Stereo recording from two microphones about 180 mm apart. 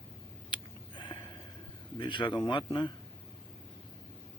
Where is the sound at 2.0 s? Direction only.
25° left (ahead or behind).